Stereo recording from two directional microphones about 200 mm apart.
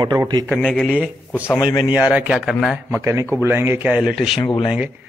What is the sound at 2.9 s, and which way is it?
A man's voice, 15° right (ahead or behind).